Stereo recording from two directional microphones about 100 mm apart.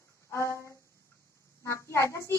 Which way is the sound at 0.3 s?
30° left (ahead or behind).